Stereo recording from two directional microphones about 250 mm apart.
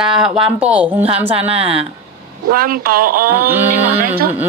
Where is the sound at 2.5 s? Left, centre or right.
Right.